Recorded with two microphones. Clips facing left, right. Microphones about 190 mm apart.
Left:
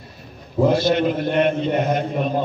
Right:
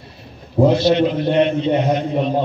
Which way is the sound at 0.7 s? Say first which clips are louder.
Right 2 dB; 50° left (ahead or behind).